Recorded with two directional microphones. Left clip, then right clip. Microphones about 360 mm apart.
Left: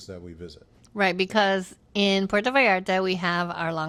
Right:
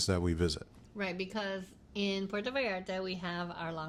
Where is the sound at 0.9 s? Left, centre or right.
Left.